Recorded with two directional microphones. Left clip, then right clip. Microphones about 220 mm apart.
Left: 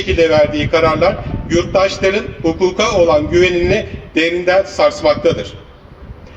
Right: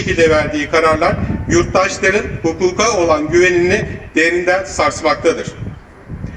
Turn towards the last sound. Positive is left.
turn(degrees=-55)  # may be behind; listen again after turning